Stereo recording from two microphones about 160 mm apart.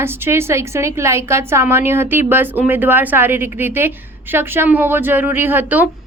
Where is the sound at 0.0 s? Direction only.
15° right (ahead or behind).